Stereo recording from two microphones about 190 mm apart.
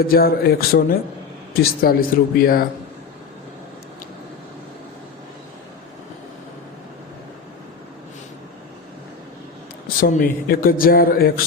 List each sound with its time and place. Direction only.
0.0 s speech: 55° left (ahead or behind)
10.0 s speech: 50° left (ahead or behind)